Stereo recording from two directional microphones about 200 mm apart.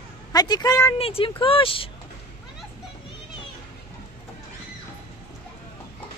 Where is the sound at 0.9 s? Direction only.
30° left (ahead or behind).